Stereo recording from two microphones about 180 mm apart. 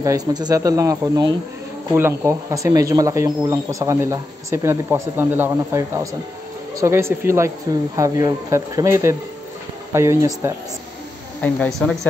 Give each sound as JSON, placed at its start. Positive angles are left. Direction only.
{"t": 0.0, "sound": "speech", "side_deg": -20}
{"t": 11.4, "sound": "a woman's voice", "side_deg": 5}